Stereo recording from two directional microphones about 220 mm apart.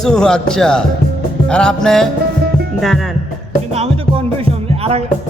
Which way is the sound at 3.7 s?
25° right (ahead or behind).